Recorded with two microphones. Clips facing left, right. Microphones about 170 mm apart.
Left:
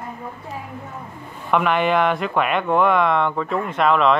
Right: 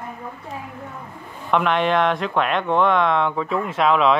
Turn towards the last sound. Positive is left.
turn(degrees=0)  # may be behind; listen again after turning